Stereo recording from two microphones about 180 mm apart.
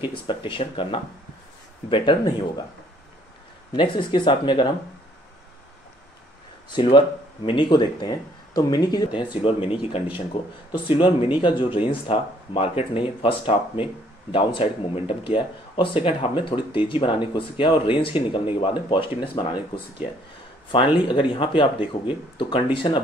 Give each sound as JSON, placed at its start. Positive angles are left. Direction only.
{"t": 0.0, "sound": "speech", "side_deg": 25}
{"t": 3.7, "sound": "speech", "side_deg": 25}
{"t": 6.7, "sound": "speech", "side_deg": 25}